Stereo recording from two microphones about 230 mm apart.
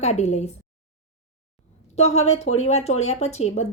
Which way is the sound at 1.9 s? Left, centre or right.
Left.